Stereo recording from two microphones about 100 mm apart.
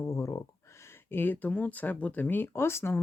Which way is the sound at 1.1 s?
20° left (ahead or behind).